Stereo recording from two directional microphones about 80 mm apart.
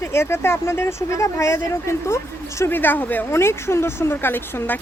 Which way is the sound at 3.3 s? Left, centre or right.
Left.